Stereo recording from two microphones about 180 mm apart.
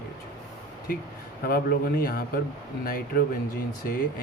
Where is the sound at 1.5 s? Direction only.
55° left (ahead or behind).